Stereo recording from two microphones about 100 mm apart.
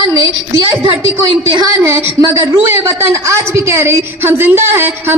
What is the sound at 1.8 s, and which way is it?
A woman's voice, 35° right (ahead or behind).